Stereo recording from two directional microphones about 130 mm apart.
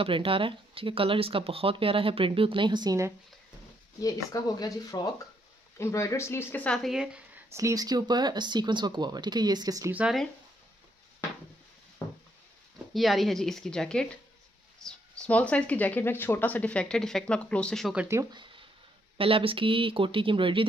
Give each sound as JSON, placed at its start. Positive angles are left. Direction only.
{"t": 0.0, "sound": "speech", "side_deg": -45}
{"t": 4.0, "sound": "speech", "side_deg": 30}
{"t": 7.5, "sound": "speech", "side_deg": -25}
{"t": 9.8, "sound": "speech", "side_deg": -10}
{"t": 12.0, "sound": "a sound", "side_deg": 15}
{"t": 12.9, "sound": "a woman's voice", "side_deg": 0}
{"t": 18.3, "sound": "a sound", "side_deg": -40}
{"t": 19.1, "sound": "speech", "side_deg": -45}